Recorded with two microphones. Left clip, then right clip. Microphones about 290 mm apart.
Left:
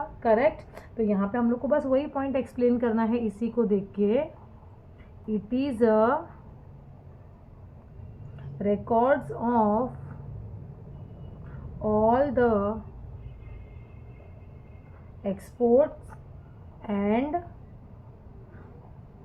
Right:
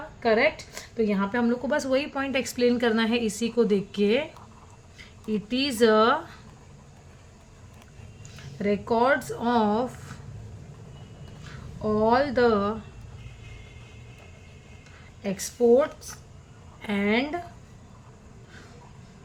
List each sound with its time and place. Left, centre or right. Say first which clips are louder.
0.2 s a woman's voice: right 1 dB; right
2.6 s a woman's voice: right 2 dB; right
5.3 s a woman's voice: right 2 dB; right
8.5 s a woman's voice: even; right
11.8 s speech: even; right
15.2 s a woman's voice: right 3 dB; right